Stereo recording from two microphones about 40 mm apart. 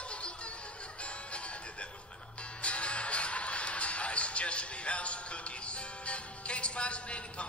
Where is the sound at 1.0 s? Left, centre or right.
Left.